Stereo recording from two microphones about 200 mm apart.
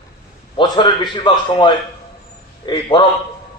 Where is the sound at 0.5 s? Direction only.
20° left (ahead or behind).